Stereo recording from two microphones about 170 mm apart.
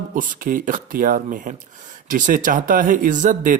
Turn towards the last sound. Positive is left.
turn(degrees=-50)  # may be behind; listen again after turning